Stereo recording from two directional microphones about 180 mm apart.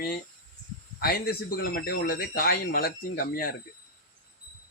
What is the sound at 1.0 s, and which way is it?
Speech, 60° left (ahead or behind).